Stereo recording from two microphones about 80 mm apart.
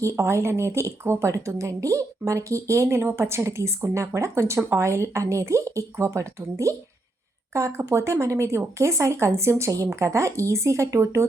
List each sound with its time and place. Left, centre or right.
0.0 s speech: right